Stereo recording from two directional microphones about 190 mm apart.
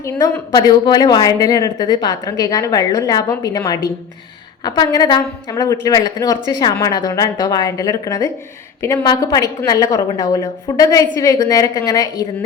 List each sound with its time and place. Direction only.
0.0 s a woman's voice: 20° left (ahead or behind)